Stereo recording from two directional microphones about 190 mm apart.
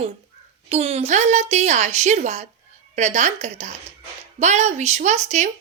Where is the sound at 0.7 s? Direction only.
30° right (ahead or behind).